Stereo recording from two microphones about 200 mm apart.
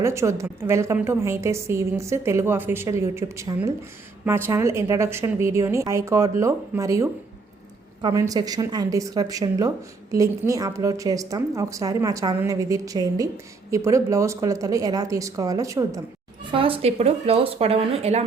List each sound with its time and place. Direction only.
0.0 s speech: 15° right (ahead or behind)
16.5 s speech: 25° right (ahead or behind)